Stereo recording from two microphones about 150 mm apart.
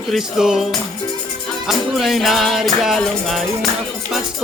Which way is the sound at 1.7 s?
Centre (ahead or behind).